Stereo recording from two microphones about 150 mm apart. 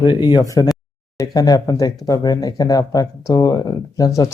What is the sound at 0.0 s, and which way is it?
A man's voice, 30° left (ahead or behind).